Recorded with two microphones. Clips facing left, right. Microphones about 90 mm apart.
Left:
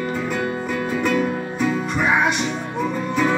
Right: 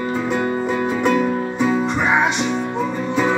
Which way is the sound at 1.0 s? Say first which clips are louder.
Right 3 dB; 25° right (ahead or behind).